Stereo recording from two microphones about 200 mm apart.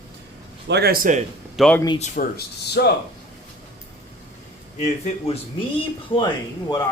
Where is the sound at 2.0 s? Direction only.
45° left (ahead or behind).